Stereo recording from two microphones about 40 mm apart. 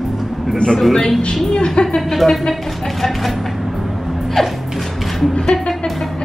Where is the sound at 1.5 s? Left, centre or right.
Left.